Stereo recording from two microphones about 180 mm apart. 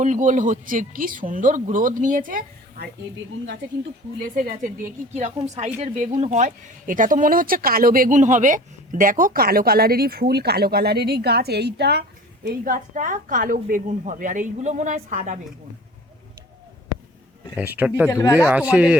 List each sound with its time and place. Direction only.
0.0 s a woman's voice: 45° right (ahead or behind)
4.4 s a woman's voice: 50° right (ahead or behind); by 12.0 s 65° right (ahead or behind)
12.5 s a woman's voice: 50° right (ahead or behind)
17.5 s speech: 10° right (ahead or behind)
18.1 s speech: 15° left (ahead or behind)
18.3 s speech: 10° right (ahead or behind)